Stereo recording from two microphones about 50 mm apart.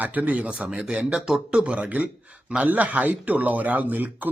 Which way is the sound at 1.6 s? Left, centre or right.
Right.